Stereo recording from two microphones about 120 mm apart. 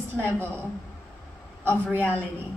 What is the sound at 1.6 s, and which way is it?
Speech, 15° right (ahead or behind).